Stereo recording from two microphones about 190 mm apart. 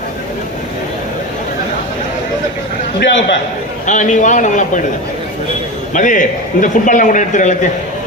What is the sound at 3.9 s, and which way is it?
Speech, 40° left (ahead or behind).